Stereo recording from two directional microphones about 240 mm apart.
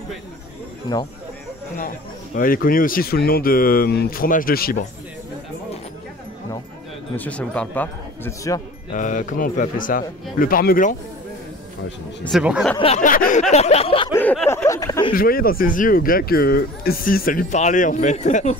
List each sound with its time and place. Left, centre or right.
2.3 s speech: left
7.2 s speech: centre
8.9 s speech: left
12.3 s speech: centre
12.7 s speech: left
14.1 s speech: centre
15.1 s speech: left